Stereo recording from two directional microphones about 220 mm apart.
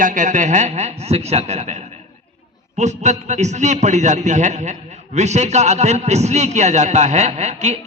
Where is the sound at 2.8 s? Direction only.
30° right (ahead or behind).